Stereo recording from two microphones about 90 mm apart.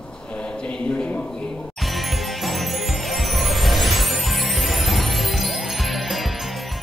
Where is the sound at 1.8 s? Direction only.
Centre (ahead or behind).